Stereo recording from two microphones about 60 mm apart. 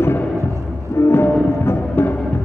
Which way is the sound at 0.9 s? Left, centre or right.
Left.